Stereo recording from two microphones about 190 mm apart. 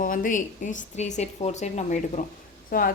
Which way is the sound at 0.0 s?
45° left (ahead or behind).